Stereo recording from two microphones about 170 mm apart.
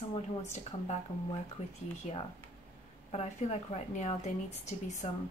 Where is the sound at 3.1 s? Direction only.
40° left (ahead or behind).